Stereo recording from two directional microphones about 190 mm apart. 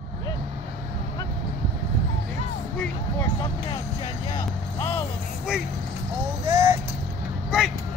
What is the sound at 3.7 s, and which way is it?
Vehicle, 20° left (ahead or behind).